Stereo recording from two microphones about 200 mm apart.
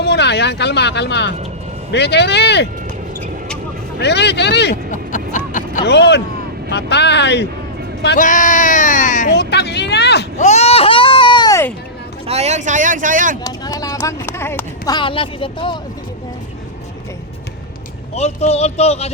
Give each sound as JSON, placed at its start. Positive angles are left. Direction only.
{"t": 0.0, "sound": "speech", "side_deg": 60}
{"t": 4.0, "sound": "speech", "side_deg": 55}
{"t": 4.9, "sound": "music", "side_deg": 40}
{"t": 5.8, "sound": "speech", "side_deg": 55}
{"t": 8.2, "sound": "speech", "side_deg": 40}
{"t": 9.3, "sound": "speech", "side_deg": 55}
{"t": 10.3, "sound": "a sound", "side_deg": 35}
{"t": 12.3, "sound": "speech", "side_deg": -35}
{"t": 13.4, "sound": "speech", "side_deg": 15}
{"t": 14.9, "sound": "speech", "side_deg": 25}
{"t": 18.1, "sound": "speech", "side_deg": 30}